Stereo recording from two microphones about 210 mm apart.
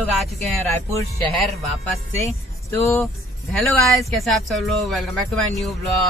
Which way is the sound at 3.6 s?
Centre (ahead or behind).